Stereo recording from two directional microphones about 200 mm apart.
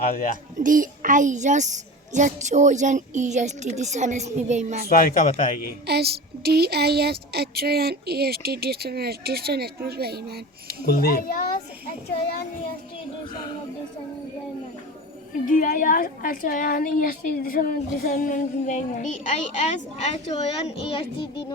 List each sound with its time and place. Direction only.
0.0 s speech: 45° left (ahead or behind)
0.6 s a woman's voice: 40° right (ahead or behind)
4.9 s speech: 45° left (ahead or behind)
5.8 s a woman's voice: 55° right (ahead or behind)
10.7 s speech: 50° left (ahead or behind)
15.4 s a woman's voice: 40° left (ahead or behind); by 21.4 s 25° left (ahead or behind)